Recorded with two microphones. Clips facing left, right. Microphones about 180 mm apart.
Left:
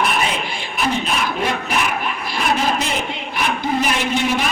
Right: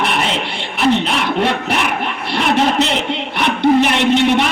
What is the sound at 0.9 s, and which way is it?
Speech, 70° right (ahead or behind).